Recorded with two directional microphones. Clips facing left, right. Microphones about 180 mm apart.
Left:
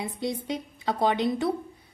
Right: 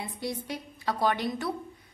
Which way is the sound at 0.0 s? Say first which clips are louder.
Left 4 dB; 20° left (ahead or behind).